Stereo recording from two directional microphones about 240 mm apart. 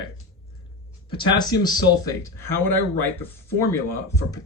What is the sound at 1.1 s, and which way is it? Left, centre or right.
Speech, centre.